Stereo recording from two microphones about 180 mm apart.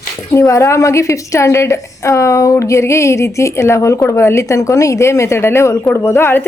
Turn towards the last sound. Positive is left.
turn(degrees=15)  # may be behind; listen again after turning